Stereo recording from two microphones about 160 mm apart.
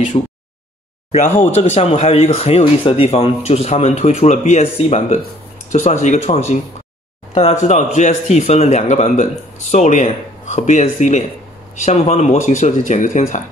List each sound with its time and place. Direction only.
1.1 s speech: 45° left (ahead or behind)
7.6 s speech: 45° left (ahead or behind)